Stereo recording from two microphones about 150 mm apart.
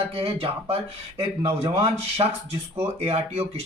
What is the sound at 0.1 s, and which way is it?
Speech, 40° right (ahead or behind).